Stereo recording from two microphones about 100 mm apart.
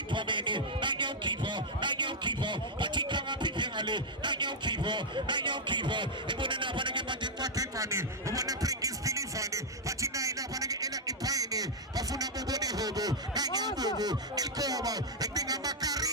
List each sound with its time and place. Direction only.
0.1 s music: 55° right (ahead or behind)